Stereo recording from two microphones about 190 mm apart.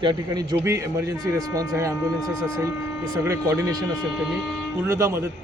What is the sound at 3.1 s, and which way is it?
Speech, 15° right (ahead or behind).